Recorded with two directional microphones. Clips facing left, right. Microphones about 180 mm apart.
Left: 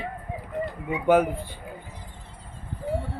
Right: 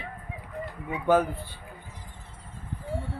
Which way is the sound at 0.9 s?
15° left (ahead or behind).